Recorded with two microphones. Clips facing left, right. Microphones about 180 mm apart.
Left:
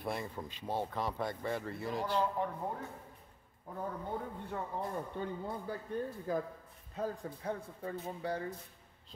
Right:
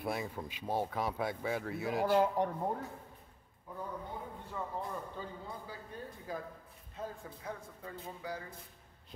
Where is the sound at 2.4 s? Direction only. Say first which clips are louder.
Right 3 dB; 80° right.